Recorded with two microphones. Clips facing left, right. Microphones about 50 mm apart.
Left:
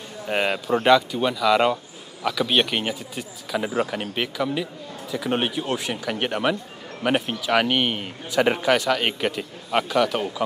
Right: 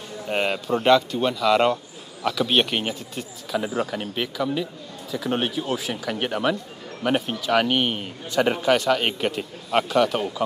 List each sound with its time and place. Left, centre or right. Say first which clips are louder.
0.3 s speech: left 1 dB; centre
0.8 s a man's voice: even; centre
5.7 s a man's voice: even; centre
8.6 s a man's voice: right 1 dB; centre